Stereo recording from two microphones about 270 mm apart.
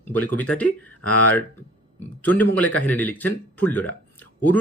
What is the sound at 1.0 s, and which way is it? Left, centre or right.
Speech, left.